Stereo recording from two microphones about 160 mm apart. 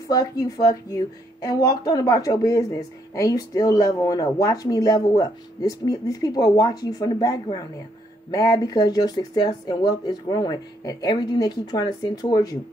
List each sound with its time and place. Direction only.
0.1 s a woman's voice: 20° left (ahead or behind)